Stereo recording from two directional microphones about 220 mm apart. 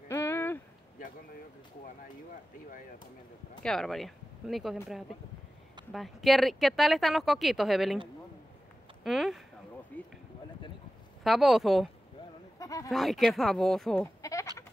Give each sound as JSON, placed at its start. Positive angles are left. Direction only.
{"t": 0.1, "sound": "a sound", "side_deg": 10}
{"t": 3.6, "sound": "speech", "side_deg": 0}
{"t": 5.9, "sound": "speech", "side_deg": 0}
{"t": 9.0, "sound": "speech", "side_deg": 0}
{"t": 9.9, "sound": "a sound", "side_deg": 5}
{"t": 11.2, "sound": "speech", "side_deg": 0}
{"t": 12.5, "sound": "a sound", "side_deg": 15}
{"t": 12.9, "sound": "speech", "side_deg": 0}
{"t": 14.2, "sound": "sheep", "side_deg": 15}